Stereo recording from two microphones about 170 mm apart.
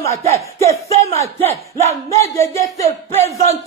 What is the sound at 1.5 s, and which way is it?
Battle cry, 40° right (ahead or behind).